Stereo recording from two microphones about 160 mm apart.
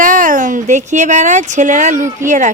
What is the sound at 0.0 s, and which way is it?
Speech, 55° right (ahead or behind).